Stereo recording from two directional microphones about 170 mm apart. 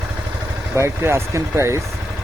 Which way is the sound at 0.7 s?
15° right (ahead or behind).